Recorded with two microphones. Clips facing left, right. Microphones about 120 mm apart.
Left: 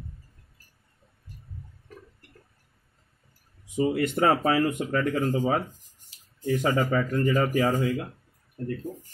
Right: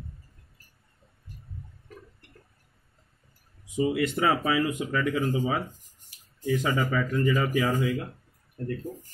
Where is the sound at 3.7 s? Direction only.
45° left (ahead or behind).